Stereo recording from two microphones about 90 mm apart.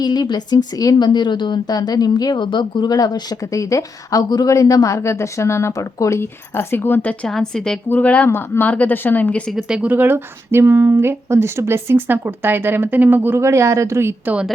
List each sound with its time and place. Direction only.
0.0 s a woman's voice: 50° left (ahead or behind); by 7.8 s 5° left (ahead or behind)
7.9 s a woman's voice: 20° left (ahead or behind)
9.5 s speech: 5° right (ahead or behind)
9.9 s speech: 20° right (ahead or behind)